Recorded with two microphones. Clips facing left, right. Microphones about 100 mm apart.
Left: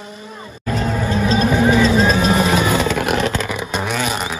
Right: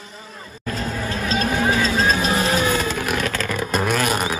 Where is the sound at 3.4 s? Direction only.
5° left (ahead or behind).